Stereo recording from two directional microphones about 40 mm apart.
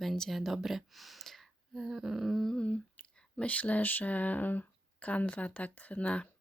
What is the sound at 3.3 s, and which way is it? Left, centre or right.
Speech, left.